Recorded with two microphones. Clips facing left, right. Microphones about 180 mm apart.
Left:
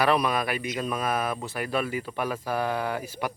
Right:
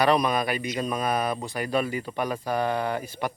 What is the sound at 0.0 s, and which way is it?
Speech, 5° left (ahead or behind).